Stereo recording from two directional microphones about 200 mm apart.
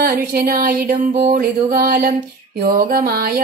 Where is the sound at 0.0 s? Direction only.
50° right (ahead or behind).